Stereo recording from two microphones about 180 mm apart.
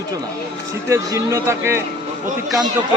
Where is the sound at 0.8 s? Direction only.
15° right (ahead or behind).